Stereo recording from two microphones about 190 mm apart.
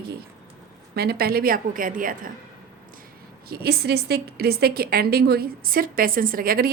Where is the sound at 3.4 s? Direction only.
55° right (ahead or behind).